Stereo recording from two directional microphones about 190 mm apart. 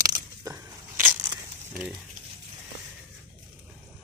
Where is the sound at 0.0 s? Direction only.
20° right (ahead or behind).